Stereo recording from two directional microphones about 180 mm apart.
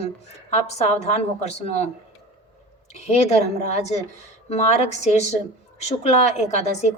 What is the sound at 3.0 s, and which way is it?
A woman's voice, 35° left (ahead or behind).